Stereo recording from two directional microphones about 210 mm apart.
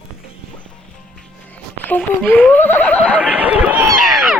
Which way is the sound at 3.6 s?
5° right (ahead or behind).